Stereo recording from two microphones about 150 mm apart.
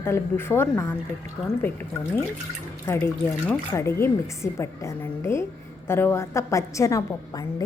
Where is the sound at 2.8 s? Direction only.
20° left (ahead or behind).